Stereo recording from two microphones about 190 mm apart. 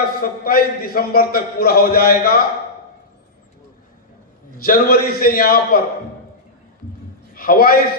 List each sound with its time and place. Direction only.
0.0 s a man's voice: 50° left (ahead or behind)
4.5 s a man's voice: 50° left (ahead or behind)
7.3 s a man's voice: 50° left (ahead or behind)